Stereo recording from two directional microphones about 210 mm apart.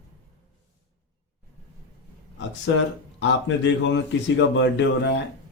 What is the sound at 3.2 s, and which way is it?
A man's voice, 60° left (ahead or behind).